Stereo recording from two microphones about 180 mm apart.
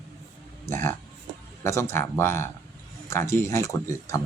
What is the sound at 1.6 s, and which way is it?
Speech, 15° left (ahead or behind).